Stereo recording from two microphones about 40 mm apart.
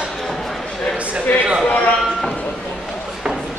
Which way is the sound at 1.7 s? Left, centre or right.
Left.